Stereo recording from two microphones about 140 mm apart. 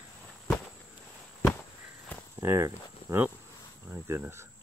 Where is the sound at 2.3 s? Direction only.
15° right (ahead or behind).